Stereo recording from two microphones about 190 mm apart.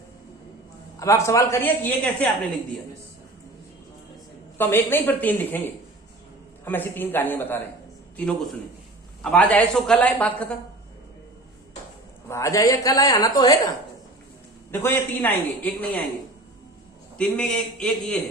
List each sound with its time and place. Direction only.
0.9 s a woman's voice: 15° left (ahead or behind)
4.5 s a woman's voice: 10° left (ahead or behind)
12.3 s a woman's voice: 15° left (ahead or behind)
14.7 s a woman's voice: 10° left (ahead or behind)
17.2 s speech: 5° left (ahead or behind)